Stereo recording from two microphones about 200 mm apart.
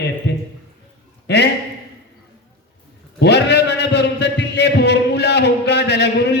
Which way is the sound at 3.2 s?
55° left (ahead or behind).